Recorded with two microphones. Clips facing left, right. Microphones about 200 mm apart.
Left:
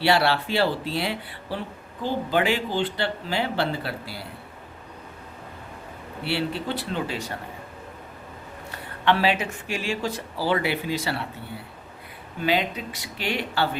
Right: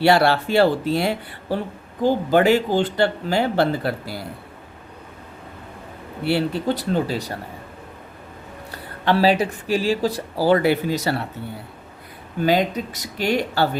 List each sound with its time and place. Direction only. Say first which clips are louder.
0.0 s speech: right 5 dB; 45° right (ahead or behind)
6.2 s speech: right 6 dB; 45° right (ahead or behind)
8.7 s speech: right 3 dB; 35° right (ahead or behind)
12.4 s speech: right 5 dB; 40° right (ahead or behind)